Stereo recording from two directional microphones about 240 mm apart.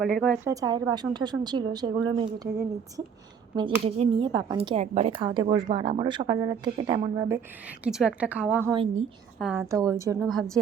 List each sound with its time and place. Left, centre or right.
0.0 s a woman's voice: centre
0.5 s a woman's voice: centre
3.5 s speech: centre
7.9 s a woman's voice: centre
8.7 s speech: right
9.4 s a woman's voice: centre
10.2 s a woman's voice: centre